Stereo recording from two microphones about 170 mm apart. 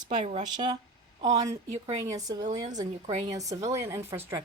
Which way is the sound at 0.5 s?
25° right (ahead or behind).